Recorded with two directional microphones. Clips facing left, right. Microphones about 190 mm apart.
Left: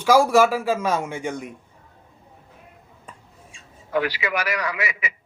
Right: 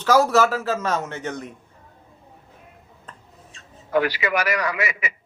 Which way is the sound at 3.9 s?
50° right (ahead or behind).